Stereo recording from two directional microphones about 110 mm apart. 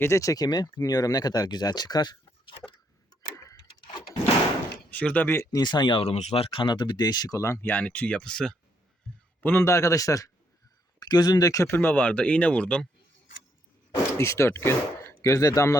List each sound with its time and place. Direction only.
0.0 s speech: 25° left (ahead or behind)
3.3 s clock: 30° left (ahead or behind)
4.9 s speech: 15° left (ahead or behind)
5.5 s speech: 40° left (ahead or behind)
6.0 s speech: 75° left (ahead or behind); by 8.5 s 5° left (ahead or behind)
9.4 s a man's voice: 20° left (ahead or behind)
14.2 s speech: 25° left (ahead or behind)